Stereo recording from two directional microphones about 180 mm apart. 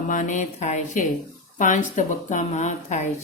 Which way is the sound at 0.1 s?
45° left (ahead or behind).